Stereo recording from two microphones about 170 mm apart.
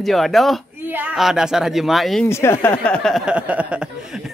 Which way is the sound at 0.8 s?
10° right (ahead or behind).